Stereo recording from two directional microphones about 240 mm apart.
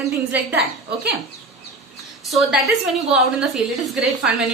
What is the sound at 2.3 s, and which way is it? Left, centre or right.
A woman's voice, centre.